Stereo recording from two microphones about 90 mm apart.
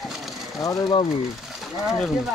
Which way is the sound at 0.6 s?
40° left (ahead or behind).